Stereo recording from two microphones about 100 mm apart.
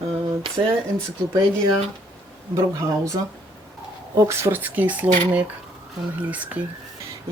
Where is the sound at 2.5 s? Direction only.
30° right (ahead or behind); by 6.6 s 15° right (ahead or behind).